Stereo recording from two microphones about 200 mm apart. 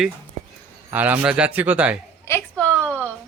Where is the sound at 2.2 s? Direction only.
10° left (ahead or behind).